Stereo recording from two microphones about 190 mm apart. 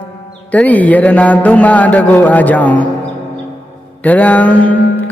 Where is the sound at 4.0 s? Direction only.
10° left (ahead or behind).